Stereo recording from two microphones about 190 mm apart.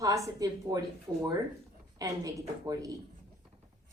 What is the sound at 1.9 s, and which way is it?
A woman's voice, 20° right (ahead or behind).